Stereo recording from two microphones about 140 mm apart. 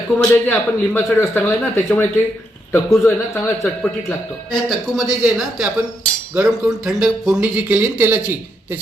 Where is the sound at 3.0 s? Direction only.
20° left (ahead or behind).